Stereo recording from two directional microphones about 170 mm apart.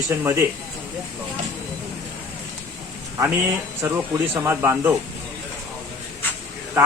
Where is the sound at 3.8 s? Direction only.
15° right (ahead or behind).